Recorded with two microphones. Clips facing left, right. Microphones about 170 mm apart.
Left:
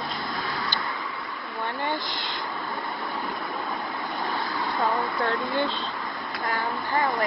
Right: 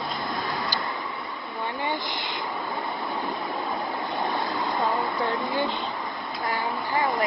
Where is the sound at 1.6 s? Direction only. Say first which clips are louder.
Even; 15° right (ahead or behind).